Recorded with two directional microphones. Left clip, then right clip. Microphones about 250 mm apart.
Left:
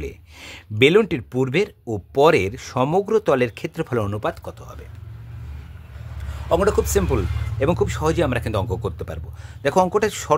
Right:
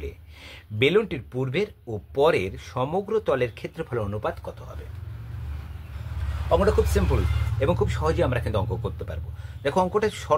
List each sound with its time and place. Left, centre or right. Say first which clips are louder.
0.0 s speech: left 5 dB; left
6.5 s speech: left 3 dB; left